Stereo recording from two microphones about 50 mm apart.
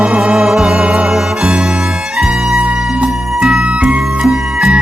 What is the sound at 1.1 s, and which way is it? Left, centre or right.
Music, centre.